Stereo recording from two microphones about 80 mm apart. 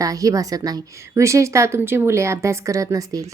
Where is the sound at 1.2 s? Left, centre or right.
Right.